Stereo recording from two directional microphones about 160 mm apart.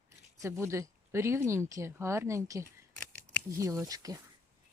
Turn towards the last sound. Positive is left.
turn(degrees=-20)  # may be behind; listen again after turning